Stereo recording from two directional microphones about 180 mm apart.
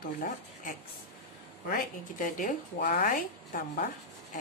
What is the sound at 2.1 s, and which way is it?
A woman's voice, 45° left (ahead or behind).